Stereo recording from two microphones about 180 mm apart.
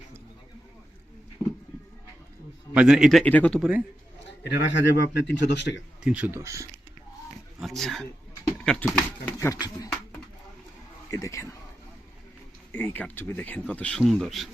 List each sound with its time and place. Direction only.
1.4 s a sound: 20° left (ahead or behind)
2.7 s a man's voice: 5° right (ahead or behind)
3.6 s speech: 10° right (ahead or behind)
4.5 s a man's voice: 75° left (ahead or behind)
6.0 s speech: 10° right (ahead or behind)
7.6 s a man's voice: centre (ahead or behind)
9.5 s speech: 20° left (ahead or behind)
11.1 s speech: 15° left (ahead or behind)
12.7 s speech: 10° left (ahead or behind)